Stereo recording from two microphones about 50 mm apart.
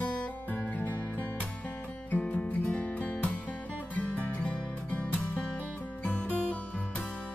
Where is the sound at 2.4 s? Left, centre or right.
Left.